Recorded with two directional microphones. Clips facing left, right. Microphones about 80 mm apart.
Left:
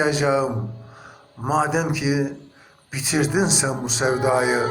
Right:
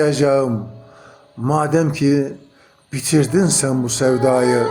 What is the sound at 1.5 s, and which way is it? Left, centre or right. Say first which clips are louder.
Speech: right 4 dB; centre.